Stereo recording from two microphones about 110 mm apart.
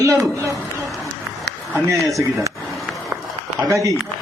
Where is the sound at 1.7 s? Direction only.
30° right (ahead or behind).